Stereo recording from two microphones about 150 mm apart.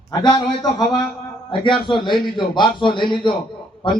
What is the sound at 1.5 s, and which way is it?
A man's voice, 35° left (ahead or behind).